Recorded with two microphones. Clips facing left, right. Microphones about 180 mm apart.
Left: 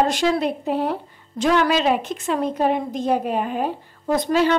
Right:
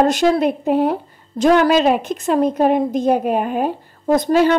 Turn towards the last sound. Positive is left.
turn(degrees=-45)  # may be behind; listen again after turning